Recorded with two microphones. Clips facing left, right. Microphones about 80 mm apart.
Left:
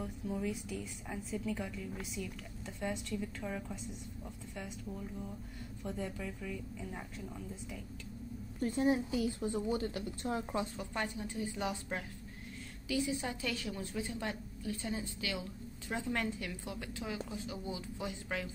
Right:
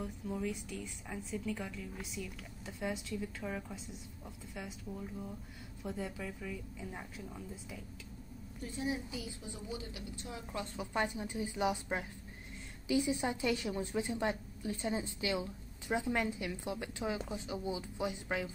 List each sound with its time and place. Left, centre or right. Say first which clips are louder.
0.0 s a woman's voice: left 1 dB; centre
8.7 s a woman's voice: left 7 dB; left
10.9 s a woman's voice: right 3 dB; centre